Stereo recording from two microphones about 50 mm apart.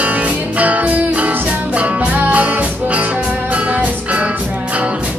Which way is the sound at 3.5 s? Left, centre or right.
Right.